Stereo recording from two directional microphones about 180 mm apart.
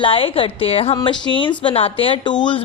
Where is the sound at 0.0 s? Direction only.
30° left (ahead or behind).